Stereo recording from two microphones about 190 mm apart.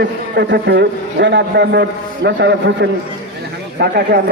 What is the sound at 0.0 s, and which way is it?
A man's voice, 60° right (ahead or behind).